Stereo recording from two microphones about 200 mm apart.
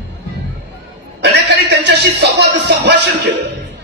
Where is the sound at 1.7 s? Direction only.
60° right (ahead or behind).